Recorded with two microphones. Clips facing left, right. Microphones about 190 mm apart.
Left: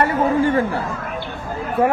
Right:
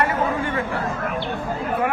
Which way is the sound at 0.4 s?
35° left (ahead or behind).